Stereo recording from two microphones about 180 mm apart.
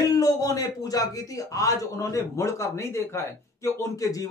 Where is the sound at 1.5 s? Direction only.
20° left (ahead or behind).